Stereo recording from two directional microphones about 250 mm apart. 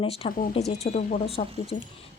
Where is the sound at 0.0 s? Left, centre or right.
Left.